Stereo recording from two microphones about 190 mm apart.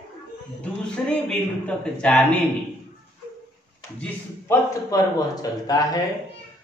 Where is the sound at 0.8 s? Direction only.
5° left (ahead or behind).